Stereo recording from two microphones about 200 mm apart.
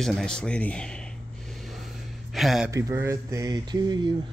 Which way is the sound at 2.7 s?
15° right (ahead or behind).